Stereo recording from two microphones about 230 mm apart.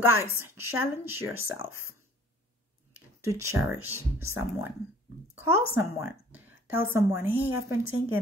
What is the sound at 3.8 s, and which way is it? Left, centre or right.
Speech, left.